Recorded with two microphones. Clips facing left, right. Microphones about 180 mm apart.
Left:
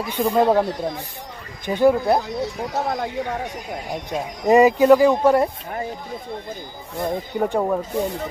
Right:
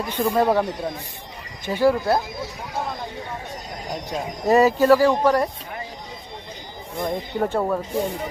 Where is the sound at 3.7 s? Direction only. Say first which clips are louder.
Left 1 dB; 5° left (ahead or behind).